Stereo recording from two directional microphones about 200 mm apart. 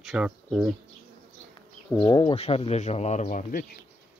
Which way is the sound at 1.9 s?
15° left (ahead or behind).